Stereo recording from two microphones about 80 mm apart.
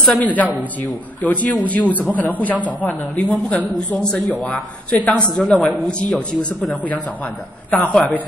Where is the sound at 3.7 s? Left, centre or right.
Centre.